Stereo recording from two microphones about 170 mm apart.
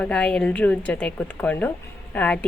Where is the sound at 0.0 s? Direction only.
5° left (ahead or behind).